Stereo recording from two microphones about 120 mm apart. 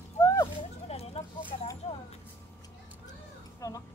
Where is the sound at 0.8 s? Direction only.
60° left (ahead or behind).